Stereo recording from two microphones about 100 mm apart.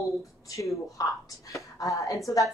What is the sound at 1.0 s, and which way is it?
Speech, 35° left (ahead or behind).